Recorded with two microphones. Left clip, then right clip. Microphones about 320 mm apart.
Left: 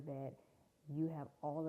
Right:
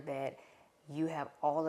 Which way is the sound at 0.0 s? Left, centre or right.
Centre.